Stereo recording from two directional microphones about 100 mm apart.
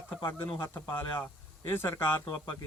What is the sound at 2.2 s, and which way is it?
Speech, 45° left (ahead or behind).